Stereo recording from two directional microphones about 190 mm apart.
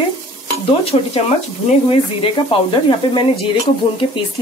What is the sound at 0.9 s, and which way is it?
Speech, 35° left (ahead or behind).